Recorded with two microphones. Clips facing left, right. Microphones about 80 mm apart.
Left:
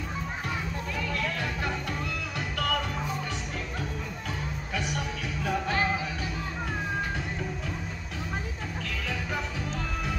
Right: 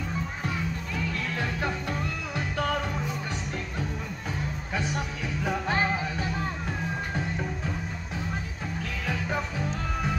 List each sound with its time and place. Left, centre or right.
2.3 s music: right
4.7 s music: right